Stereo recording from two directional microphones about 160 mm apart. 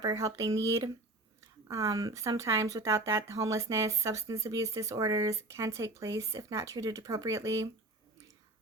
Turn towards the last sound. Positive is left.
turn(degrees=-20)  # may be behind; listen again after turning